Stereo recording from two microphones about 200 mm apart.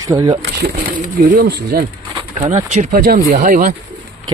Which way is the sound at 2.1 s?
30° right (ahead or behind).